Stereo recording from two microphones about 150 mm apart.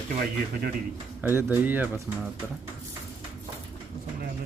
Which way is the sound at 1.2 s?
15° right (ahead or behind).